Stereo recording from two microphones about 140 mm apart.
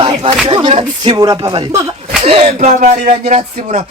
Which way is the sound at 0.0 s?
45° right (ahead or behind).